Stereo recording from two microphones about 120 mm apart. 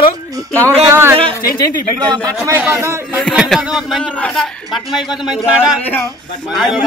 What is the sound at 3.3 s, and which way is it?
Speech, centre (ahead or behind).